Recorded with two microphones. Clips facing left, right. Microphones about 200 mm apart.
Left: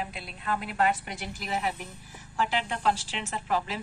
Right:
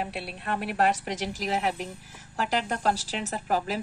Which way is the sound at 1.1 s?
90° right.